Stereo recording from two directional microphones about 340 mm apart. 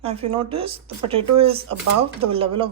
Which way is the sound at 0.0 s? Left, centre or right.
Centre.